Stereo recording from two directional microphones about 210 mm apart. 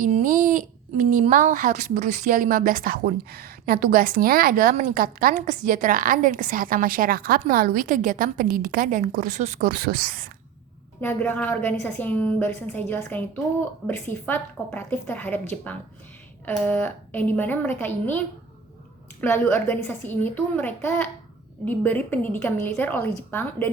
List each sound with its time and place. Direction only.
0.0 s a child's voice: 40° right (ahead or behind)
11.0 s a woman's voice: 10° left (ahead or behind)
19.2 s a woman's voice: 10° left (ahead or behind)